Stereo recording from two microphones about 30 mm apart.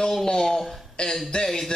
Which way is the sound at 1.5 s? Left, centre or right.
Centre.